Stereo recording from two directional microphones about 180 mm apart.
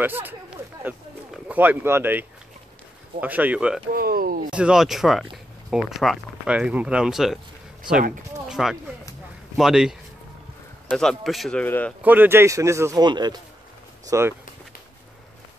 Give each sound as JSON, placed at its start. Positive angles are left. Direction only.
{"t": 0.0, "sound": "speech", "side_deg": -10}
{"t": 3.9, "sound": "speech", "side_deg": -55}
{"t": 4.5, "sound": "speech", "side_deg": -5}
{"t": 8.5, "sound": "a sound", "side_deg": 0}
{"t": 9.6, "sound": "speech", "side_deg": 0}
{"t": 12.0, "sound": "speech", "side_deg": -10}